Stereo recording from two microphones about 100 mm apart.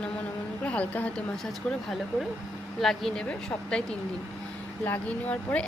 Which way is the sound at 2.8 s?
5° left (ahead or behind).